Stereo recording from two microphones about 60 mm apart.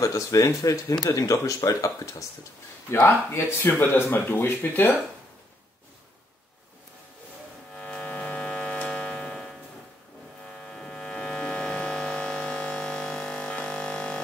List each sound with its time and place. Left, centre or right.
0.0 s speech: left
3.3 s speech: left
7.7 s music: centre
8.4 s a sound: centre
10.6 s mains hum: centre
13.4 s a sound: left